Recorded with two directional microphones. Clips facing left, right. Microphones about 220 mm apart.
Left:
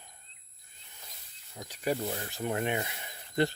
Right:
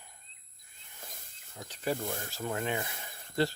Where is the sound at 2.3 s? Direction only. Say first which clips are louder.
Left 3 dB; 20° left (ahead or behind).